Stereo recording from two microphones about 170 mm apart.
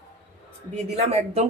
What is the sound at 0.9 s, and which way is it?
Speech, 40° right (ahead or behind).